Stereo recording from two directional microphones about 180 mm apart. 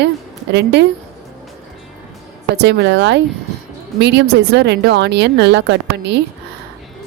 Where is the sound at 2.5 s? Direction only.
70° right (ahead or behind).